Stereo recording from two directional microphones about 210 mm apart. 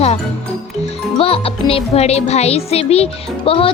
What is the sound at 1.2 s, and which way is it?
Music, 25° left (ahead or behind).